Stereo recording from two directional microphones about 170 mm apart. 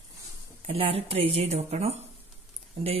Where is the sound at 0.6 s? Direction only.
35° right (ahead or behind).